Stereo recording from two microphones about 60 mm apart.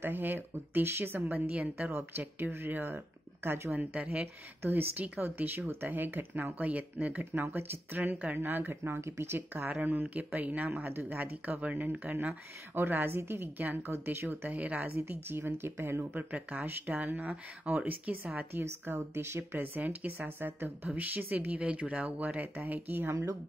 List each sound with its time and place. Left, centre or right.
0.0 s speech: right
1.5 s speech: right
2.1 s speech: right
3.7 s speech: right
4.6 s speech: right
14.5 s speech: right
15.0 s speech: right
19.1 s speech: right
19.6 s speech: right
23.0 s a woman's voice: right